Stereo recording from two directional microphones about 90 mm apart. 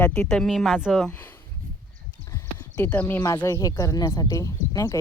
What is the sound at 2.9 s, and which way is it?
Speech, 20° left (ahead or behind).